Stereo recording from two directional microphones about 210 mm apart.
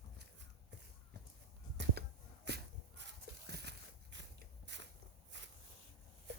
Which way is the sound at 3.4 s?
50° right (ahead or behind).